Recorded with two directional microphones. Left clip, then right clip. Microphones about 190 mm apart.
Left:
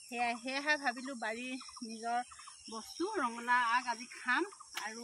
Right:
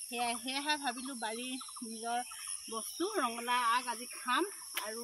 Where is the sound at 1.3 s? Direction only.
45° left (ahead or behind).